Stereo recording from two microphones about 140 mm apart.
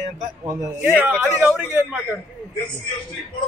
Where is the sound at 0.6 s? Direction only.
10° right (ahead or behind).